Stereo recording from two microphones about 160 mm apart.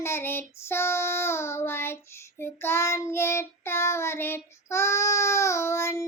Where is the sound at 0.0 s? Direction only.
15° left (ahead or behind).